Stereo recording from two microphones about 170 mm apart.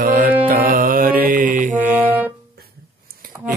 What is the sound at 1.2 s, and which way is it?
Mantra, 55° right (ahead or behind).